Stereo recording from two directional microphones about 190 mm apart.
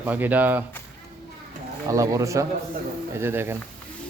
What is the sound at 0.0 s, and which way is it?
Speech, 10° right (ahead or behind).